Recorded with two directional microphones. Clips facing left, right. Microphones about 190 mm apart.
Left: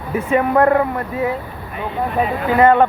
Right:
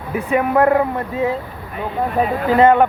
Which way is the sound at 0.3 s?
10° right (ahead or behind).